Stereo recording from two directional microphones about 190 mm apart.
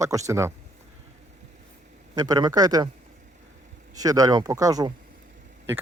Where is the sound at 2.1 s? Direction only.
20° right (ahead or behind).